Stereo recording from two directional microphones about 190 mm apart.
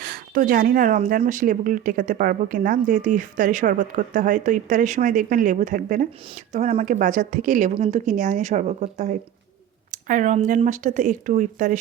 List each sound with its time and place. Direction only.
0.0 s speech: 50° right (ahead or behind)